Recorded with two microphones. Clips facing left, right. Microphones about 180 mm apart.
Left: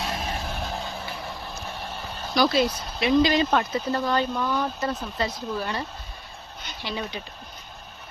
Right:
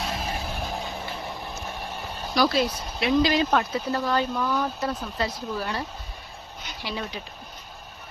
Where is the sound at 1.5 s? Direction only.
5° right (ahead or behind).